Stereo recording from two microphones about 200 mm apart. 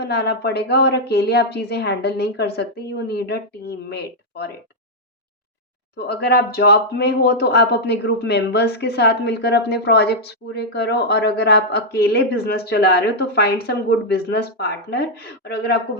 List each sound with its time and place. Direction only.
0.0 s speech: 55° left (ahead or behind)
6.0 s speech: 55° left (ahead or behind)